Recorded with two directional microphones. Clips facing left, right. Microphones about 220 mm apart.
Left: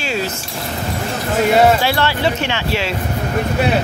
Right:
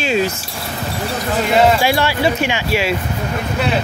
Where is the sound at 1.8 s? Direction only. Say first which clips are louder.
Right 1 dB; 10° right (ahead or behind).